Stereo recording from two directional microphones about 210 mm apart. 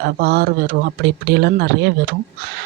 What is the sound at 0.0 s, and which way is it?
Speech, 50° right (ahead or behind).